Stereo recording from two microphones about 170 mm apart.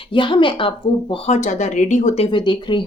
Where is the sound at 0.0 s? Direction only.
30° left (ahead or behind).